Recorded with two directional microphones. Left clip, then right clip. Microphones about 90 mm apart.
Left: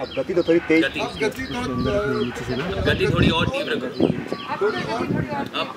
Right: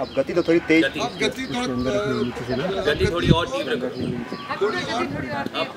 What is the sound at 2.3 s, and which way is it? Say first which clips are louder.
Speech: right 1 dB; 25° left (ahead or behind).